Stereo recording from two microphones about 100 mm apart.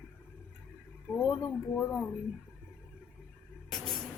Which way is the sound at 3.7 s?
5° left (ahead or behind).